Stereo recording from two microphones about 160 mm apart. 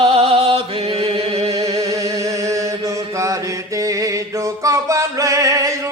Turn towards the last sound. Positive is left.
turn(degrees=-20)  # may be behind; listen again after turning